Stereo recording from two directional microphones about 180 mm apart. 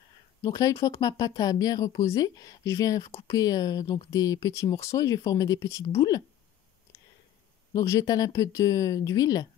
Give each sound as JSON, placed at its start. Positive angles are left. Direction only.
{"t": 0.4, "sound": "speech", "side_deg": 20}
{"t": 7.7, "sound": "speech", "side_deg": 15}